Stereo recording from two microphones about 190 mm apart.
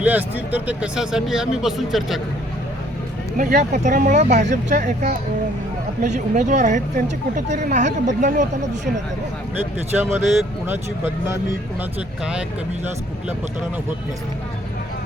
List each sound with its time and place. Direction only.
0.0 s speech: 10° right (ahead or behind)
3.3 s speech: 40° right (ahead or behind)
9.9 s speech: 10° right (ahead or behind)